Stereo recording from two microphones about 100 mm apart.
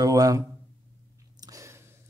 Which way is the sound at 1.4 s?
30° right (ahead or behind).